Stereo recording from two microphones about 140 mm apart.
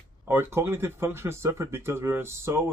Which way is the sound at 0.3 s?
15° right (ahead or behind).